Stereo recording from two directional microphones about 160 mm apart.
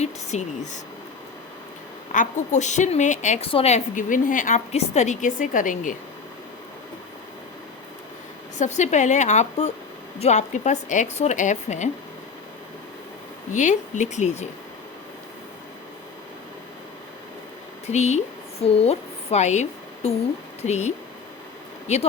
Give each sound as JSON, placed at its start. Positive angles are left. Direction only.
{"t": 0.0, "sound": "a woman's voice", "side_deg": 45}
{"t": 2.1, "sound": "a woman's voice", "side_deg": 50}
{"t": 8.5, "sound": "a woman's voice", "side_deg": 45}
{"t": 13.5, "sound": "a woman's voice", "side_deg": 50}
{"t": 17.8, "sound": "a woman's voice", "side_deg": 45}